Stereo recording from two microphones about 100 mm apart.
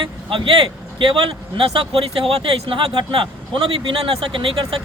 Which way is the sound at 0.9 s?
60° right (ahead or behind).